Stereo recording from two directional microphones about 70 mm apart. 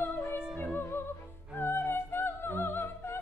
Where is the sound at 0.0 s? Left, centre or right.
Left.